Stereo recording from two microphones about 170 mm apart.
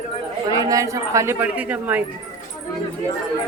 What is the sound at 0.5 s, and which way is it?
Speech, 20° right (ahead or behind).